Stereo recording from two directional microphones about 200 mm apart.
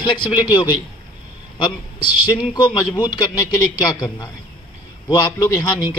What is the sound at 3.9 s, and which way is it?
A man's voice, 20° left (ahead or behind).